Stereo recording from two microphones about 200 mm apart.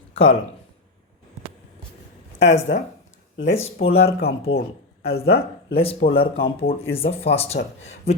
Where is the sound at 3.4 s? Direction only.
30° left (ahead or behind).